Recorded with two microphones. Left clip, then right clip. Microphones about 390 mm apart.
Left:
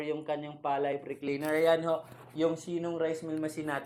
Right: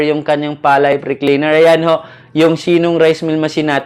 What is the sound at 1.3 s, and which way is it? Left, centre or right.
Speech, right.